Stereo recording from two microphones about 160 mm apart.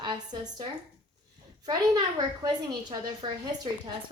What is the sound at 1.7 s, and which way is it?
A woman's voice, 25° right (ahead or behind).